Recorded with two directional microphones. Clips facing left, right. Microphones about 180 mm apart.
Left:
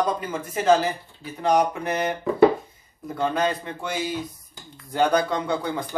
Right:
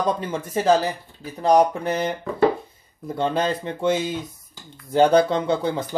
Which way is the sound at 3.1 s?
30° right (ahead or behind).